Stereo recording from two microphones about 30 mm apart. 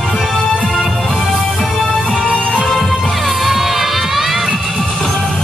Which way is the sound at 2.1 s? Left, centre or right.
Left.